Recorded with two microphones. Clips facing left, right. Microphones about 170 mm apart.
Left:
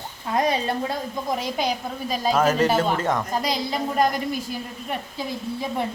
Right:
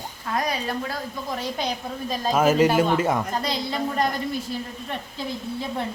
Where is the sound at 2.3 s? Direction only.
10° right (ahead or behind).